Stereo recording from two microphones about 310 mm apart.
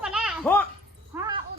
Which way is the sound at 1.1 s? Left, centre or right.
Centre.